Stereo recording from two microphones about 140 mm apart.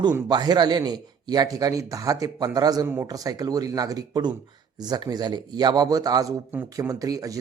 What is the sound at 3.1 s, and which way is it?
Speech, 25° right (ahead or behind).